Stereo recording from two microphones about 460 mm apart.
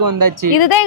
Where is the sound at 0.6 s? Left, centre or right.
Left.